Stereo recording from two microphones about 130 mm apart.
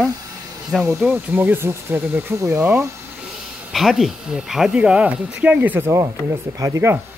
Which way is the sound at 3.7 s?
Centre (ahead or behind).